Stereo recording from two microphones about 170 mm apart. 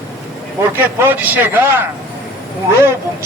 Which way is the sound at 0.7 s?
10° right (ahead or behind).